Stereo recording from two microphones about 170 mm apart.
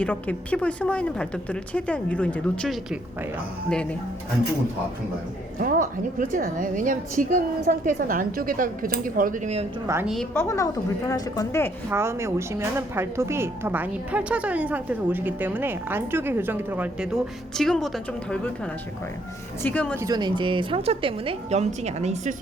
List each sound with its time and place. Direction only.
0.0 s a woman's voice: 10° left (ahead or behind)
5.5 s a woman's voice: 55° right (ahead or behind)
9.8 s a woman's voice: 15° right (ahead or behind)
10.3 s a woman's voice: 15° left (ahead or behind)
11.9 s a woman's voice: 15° right (ahead or behind); by 18.3 s centre (ahead or behind)
19.6 s a woman's voice: 10° left (ahead or behind)
20.0 s a woman's voice: 20° right (ahead or behind); by 22.4 s 40° right (ahead or behind)